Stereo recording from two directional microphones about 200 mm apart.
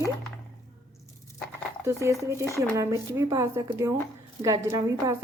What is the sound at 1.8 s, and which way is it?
Speech, 15° right (ahead or behind).